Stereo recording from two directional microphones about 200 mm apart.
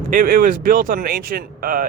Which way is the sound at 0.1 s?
45° right (ahead or behind).